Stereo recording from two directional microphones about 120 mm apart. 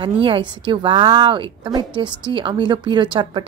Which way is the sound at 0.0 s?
45° right (ahead or behind).